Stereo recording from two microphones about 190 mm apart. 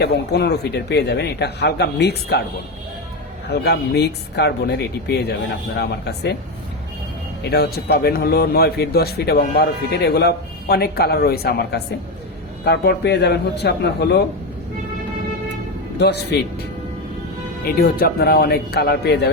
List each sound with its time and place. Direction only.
0.0 s a man's voice: 60° left (ahead or behind)
3.5 s a man's voice: 60° left (ahead or behind)
7.4 s a man's voice: 55° left (ahead or behind)
16.0 s a man's voice: 60° left (ahead or behind)
17.7 s a man's voice: 55° left (ahead or behind)